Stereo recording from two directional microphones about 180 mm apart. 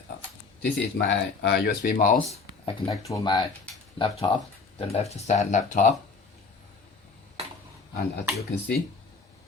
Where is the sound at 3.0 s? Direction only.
20° left (ahead or behind); by 5.9 s 40° left (ahead or behind).